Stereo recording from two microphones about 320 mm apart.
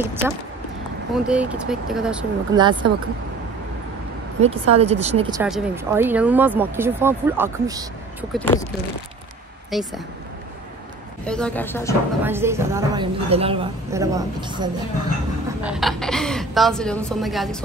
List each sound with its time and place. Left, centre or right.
0.0 s a woman's voice: centre
2.5 s speech: centre
4.4 s speech: centre
5.4 s speech: centre
8.3 s a woman's voice: centre
9.7 s speech: centre
11.2 s a woman's voice: centre
12.2 s speech: centre
15.6 s a woman's voice: centre